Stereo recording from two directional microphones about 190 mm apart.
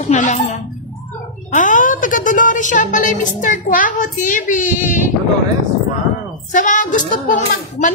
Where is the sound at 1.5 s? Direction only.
45° left (ahead or behind).